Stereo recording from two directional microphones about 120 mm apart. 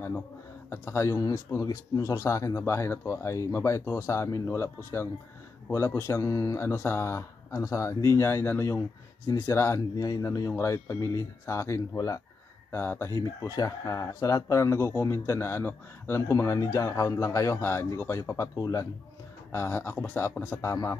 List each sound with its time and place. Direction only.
0.7 s speech: 25° left (ahead or behind)